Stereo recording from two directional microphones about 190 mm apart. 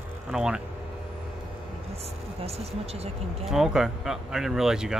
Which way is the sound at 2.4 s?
30° right (ahead or behind).